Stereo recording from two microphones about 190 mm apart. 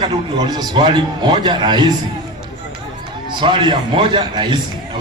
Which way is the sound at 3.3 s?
25° right (ahead or behind).